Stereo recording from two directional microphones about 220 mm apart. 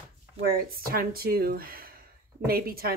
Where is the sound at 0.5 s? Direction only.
45° right (ahead or behind).